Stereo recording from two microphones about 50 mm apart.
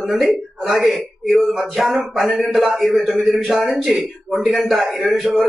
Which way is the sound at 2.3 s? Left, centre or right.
Centre.